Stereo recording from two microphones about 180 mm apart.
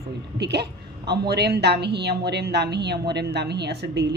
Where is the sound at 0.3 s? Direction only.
70° right (ahead or behind).